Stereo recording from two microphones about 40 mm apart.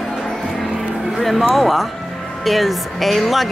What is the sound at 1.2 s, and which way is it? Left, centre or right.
Speech, centre.